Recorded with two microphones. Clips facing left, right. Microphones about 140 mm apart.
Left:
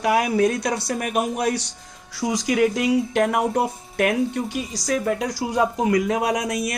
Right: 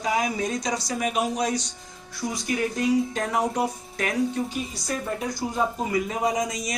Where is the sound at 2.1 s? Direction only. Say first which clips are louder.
Left 7 dB; 90° left.